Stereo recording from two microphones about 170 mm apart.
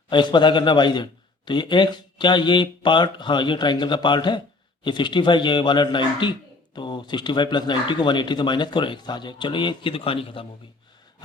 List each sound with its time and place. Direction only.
0.1 s a man's voice: 25° left (ahead or behind)